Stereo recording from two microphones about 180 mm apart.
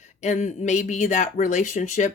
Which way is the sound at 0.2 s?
40° left (ahead or behind).